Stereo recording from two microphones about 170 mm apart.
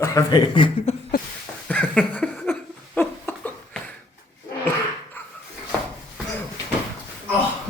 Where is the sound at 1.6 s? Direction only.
5° left (ahead or behind).